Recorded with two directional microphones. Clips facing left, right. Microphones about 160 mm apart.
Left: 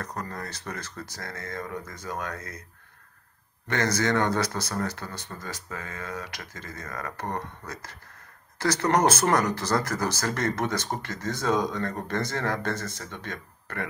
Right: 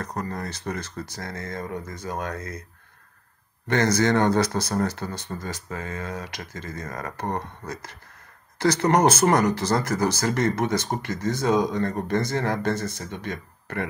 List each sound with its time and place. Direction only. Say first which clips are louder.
0.0 s speech: right 4 dB; 20° right (ahead or behind)
3.6 s speech: right 5 dB; 30° right (ahead or behind)
8.8 s speech: right 3 dB; 10° right (ahead or behind)